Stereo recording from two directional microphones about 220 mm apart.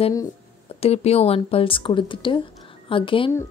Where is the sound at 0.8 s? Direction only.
25° left (ahead or behind).